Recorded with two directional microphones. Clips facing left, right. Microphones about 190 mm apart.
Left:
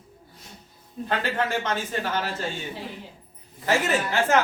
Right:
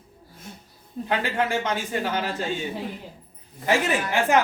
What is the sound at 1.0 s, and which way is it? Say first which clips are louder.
A man's voice: right 1 dB; 10° right (ahead or behind).